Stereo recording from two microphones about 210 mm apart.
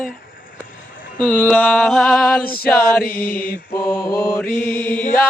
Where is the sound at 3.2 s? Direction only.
45° left (ahead or behind).